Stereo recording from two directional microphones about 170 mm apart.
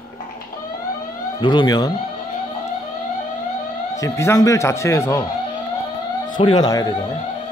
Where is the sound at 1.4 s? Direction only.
25° left (ahead or behind).